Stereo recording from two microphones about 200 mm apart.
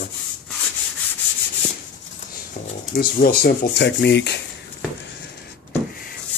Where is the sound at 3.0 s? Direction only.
45° left (ahead or behind).